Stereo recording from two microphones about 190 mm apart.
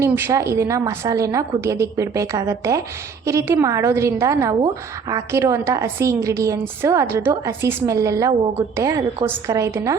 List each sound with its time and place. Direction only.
0.0 s a woman's voice: 15° right (ahead or behind)